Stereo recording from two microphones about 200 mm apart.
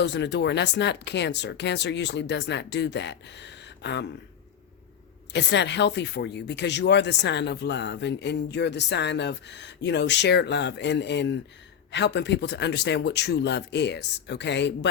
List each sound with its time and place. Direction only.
0.0 s speech: 60° left (ahead or behind)
5.3 s speech: 60° left (ahead or behind)